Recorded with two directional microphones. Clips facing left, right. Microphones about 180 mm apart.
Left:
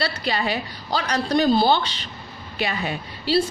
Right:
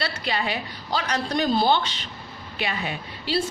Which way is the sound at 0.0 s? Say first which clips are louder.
Left 3 dB; 40° left (ahead or behind).